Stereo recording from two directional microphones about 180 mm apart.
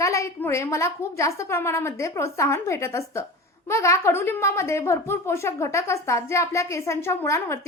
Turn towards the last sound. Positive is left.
turn(degrees=15)  # may be behind; listen again after turning